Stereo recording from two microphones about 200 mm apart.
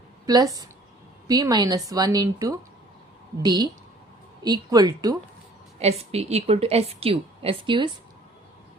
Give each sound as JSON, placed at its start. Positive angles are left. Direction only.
{"t": 0.3, "sound": "a woman's voice", "side_deg": -20}
{"t": 5.8, "sound": "a woman's voice", "side_deg": -30}